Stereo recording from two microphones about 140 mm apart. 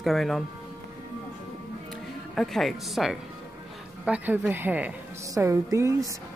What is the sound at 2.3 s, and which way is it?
Speech, centre (ahead or behind).